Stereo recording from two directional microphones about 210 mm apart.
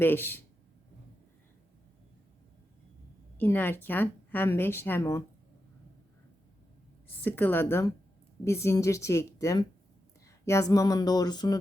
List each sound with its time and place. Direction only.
0.0 s a woman's voice: 10° left (ahead or behind)
3.3 s a woman's voice: 10° left (ahead or behind)
7.2 s a woman's voice: 10° left (ahead or behind)